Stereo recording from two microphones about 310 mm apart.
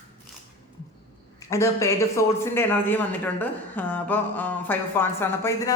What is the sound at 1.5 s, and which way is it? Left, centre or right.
Speech, centre.